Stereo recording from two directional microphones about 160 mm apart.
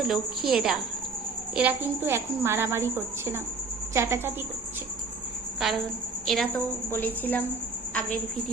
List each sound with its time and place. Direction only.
0.0 s a woman's voice: 5° right (ahead or behind)
5.5 s a woman's voice: centre (ahead or behind)
6.9 s a woman's voice: 10° left (ahead or behind)